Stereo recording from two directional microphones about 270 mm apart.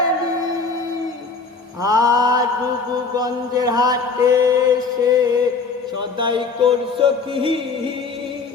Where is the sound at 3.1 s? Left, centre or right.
Centre.